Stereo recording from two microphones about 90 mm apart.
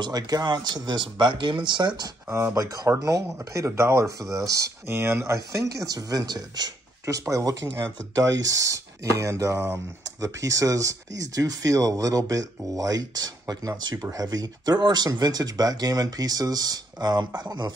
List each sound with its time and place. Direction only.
0.0 s speech: 50° right (ahead or behind)
2.2 s speech: 25° right (ahead or behind)
2.5 s speech: 40° right (ahead or behind)